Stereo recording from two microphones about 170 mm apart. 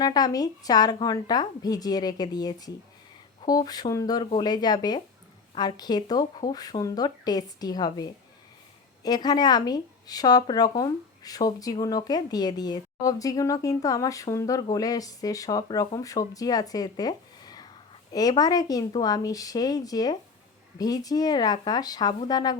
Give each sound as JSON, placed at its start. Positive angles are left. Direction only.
{"t": 0.0, "sound": "speech", "side_deg": 20}
{"t": 9.0, "sound": "speech", "side_deg": 25}